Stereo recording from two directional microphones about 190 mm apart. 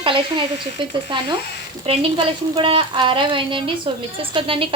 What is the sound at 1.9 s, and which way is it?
Speech, 30° right (ahead or behind).